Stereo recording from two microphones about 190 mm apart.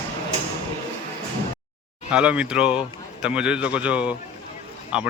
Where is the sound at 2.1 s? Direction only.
5° right (ahead or behind).